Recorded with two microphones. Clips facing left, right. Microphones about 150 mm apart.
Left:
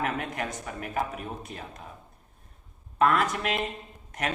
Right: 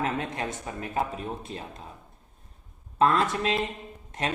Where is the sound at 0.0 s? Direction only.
25° right (ahead or behind).